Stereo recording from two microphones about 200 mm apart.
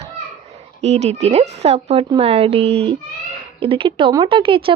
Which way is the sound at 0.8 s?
35° right (ahead or behind).